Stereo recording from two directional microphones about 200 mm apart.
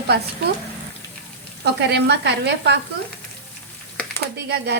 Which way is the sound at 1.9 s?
60° right (ahead or behind).